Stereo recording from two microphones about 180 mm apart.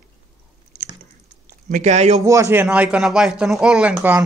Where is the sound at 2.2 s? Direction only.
15° right (ahead or behind).